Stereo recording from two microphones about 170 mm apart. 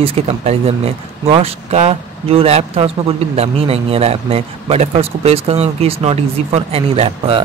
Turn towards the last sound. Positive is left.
turn(degrees=-35)  # may be behind; listen again after turning